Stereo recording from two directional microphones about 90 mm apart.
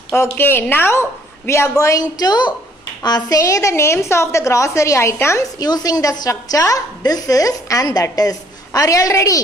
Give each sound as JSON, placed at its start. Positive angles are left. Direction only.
{"t": 0.1, "sound": "a woman's voice", "side_deg": 25}
{"t": 5.6, "sound": "a woman's voice", "side_deg": 45}